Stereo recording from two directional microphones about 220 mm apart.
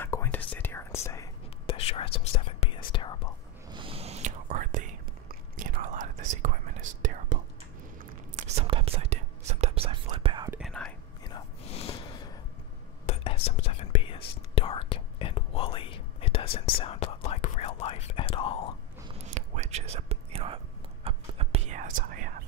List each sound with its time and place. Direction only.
0.0 s whispering: 10° left (ahead or behind)
1.8 s whispering: 25° left (ahead or behind)
3.7 s whispering: 25° right (ahead or behind)
8.4 s whispering: 25° right (ahead or behind)
10.5 s whispering: centre (ahead or behind)
11.2 s gasp: 25° left (ahead or behind)
13.0 s whispering: 25° left (ahead or behind)
19.1 s whispering: 30° right (ahead or behind)